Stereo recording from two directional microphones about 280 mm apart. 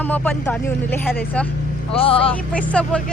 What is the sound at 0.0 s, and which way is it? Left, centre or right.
Speech, centre.